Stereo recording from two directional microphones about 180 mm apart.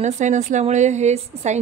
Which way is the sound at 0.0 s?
40° right (ahead or behind).